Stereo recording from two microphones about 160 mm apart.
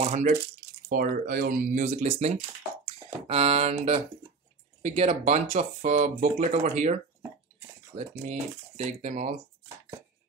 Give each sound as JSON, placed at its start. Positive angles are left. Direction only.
{"t": 0.0, "sound": "speech", "side_deg": -50}
{"t": 0.8, "sound": "speech", "side_deg": -65}
{"t": 8.0, "sound": "speech", "side_deg": -45}